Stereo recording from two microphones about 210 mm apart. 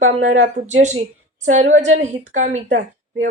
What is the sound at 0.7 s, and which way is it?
A woman's voice, 35° right (ahead or behind).